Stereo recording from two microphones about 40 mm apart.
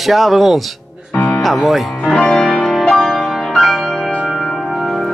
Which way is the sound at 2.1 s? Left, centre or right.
Centre.